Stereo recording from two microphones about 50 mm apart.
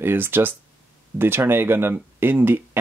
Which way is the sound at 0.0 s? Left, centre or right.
Right.